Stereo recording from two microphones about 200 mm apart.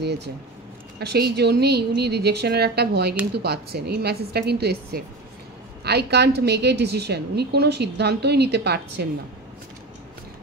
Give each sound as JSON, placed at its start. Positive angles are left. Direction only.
{"t": 0.9, "sound": "a woman's voice", "side_deg": -55}